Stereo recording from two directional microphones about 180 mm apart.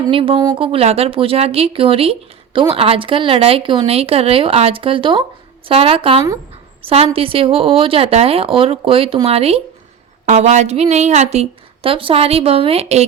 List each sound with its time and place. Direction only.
0.0 s speech: 30° right (ahead or behind)